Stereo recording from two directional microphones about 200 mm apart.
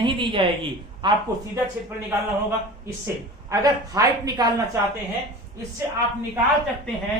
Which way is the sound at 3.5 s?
15° right (ahead or behind).